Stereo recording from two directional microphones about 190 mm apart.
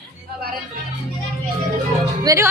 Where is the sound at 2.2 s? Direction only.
15° right (ahead or behind).